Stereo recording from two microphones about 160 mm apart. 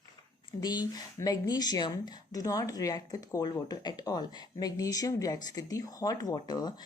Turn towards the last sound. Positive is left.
turn(degrees=25)  # may be behind; listen again after turning